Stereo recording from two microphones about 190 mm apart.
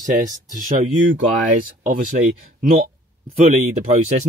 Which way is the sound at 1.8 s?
45° right (ahead or behind).